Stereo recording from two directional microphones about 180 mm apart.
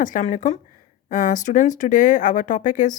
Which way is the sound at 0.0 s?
45° left (ahead or behind).